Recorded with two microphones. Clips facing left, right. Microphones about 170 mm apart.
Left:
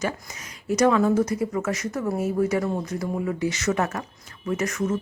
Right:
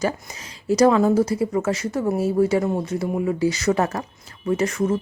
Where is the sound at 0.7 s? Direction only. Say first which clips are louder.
Right 3 dB; 30° right (ahead or behind).